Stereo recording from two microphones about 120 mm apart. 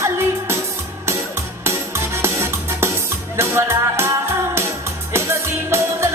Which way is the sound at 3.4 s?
20° right (ahead or behind).